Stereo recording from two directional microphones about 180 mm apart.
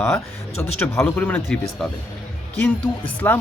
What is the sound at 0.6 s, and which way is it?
Speech, 10° left (ahead or behind).